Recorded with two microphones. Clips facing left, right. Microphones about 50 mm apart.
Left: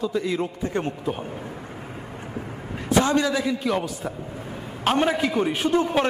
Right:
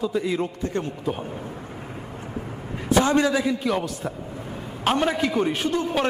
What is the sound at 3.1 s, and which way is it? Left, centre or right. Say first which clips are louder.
Speech: right 2 dB; centre.